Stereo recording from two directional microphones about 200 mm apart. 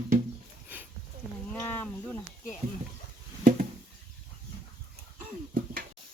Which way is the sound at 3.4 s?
40° right (ahead or behind).